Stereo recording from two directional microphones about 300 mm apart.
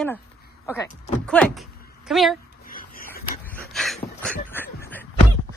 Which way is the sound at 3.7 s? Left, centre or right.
Centre.